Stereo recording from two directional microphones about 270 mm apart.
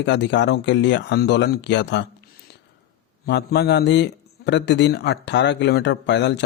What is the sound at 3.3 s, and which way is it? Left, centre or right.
A man's voice, left.